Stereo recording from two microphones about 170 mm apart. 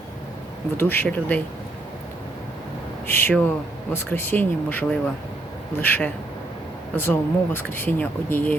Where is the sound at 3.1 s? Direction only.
10° left (ahead or behind).